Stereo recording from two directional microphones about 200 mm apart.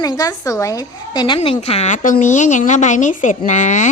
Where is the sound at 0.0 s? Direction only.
20° left (ahead or behind).